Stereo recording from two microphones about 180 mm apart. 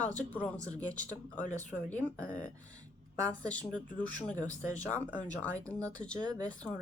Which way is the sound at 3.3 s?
5° left (ahead or behind).